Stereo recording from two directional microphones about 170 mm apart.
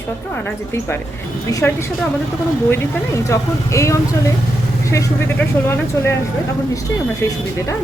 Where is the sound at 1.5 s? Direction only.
20° left (ahead or behind).